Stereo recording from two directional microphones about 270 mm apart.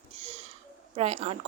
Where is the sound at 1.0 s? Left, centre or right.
Right.